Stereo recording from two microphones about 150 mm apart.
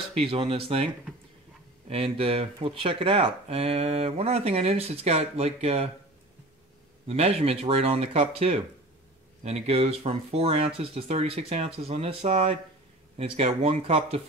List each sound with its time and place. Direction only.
0.2 s speech: 40° right (ahead or behind)
2.1 s speech: 40° right (ahead or behind)
7.1 s speech: 40° right (ahead or behind)